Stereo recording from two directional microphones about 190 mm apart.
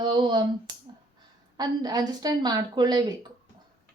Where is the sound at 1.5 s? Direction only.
20° right (ahead or behind).